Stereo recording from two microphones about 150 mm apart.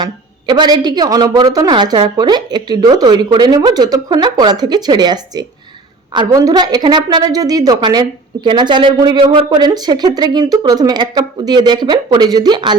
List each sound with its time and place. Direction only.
0.0 s speech: 30° right (ahead or behind)